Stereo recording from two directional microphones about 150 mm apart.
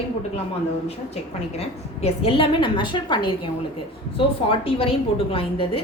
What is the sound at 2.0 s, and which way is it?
A woman's voice, 40° left (ahead or behind).